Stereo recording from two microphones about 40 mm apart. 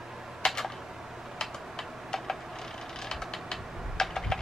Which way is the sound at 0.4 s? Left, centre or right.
Centre.